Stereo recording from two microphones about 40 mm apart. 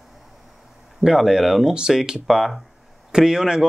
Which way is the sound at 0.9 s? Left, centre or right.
Centre.